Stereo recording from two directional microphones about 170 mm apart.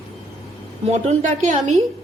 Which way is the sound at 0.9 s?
45° right (ahead or behind).